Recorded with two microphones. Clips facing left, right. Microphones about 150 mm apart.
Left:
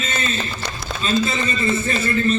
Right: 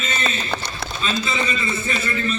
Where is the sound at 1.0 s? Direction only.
40° left (ahead or behind).